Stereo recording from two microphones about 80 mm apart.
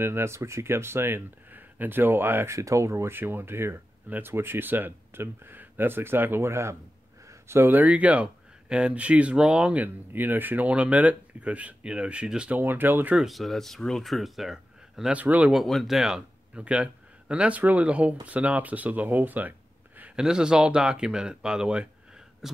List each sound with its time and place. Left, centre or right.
0.0 s speech: right
2.5 s speech: right; by 12.5 s centre
12.5 s speech: right
13.1 s speech: centre
15.1 s speech: centre
15.5 s a man's voice: centre; by 19.5 s right
20.2 s speech: centre